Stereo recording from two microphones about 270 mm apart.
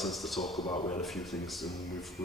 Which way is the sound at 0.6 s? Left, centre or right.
Centre.